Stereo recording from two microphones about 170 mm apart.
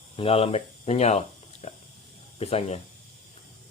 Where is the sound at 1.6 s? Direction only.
40° left (ahead or behind).